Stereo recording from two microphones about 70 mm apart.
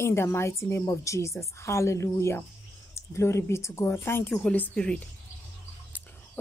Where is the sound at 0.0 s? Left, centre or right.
Left.